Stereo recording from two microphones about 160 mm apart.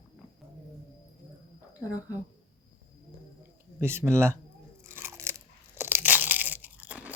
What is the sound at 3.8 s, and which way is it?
Speech, 15° right (ahead or behind).